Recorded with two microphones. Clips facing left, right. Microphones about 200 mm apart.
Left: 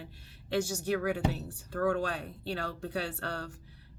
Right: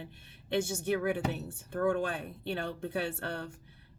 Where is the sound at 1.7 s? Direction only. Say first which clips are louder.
Even; 20° right (ahead or behind).